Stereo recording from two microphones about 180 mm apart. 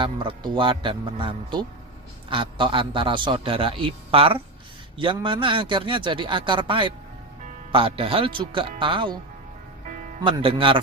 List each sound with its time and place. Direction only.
0.0 s a man's voice: 25° right (ahead or behind)
10.2 s a man's voice: 30° right (ahead or behind)